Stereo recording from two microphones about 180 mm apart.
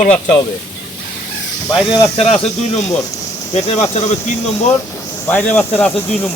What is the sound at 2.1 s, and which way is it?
Speech, 35° left (ahead or behind).